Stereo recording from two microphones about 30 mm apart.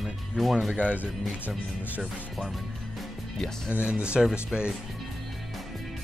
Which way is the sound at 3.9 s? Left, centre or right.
Right.